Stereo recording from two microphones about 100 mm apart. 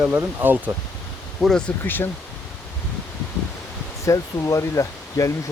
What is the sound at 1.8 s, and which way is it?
Speech, 20° left (ahead or behind).